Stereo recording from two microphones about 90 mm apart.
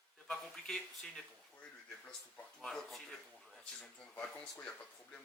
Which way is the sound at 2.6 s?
Centre (ahead or behind).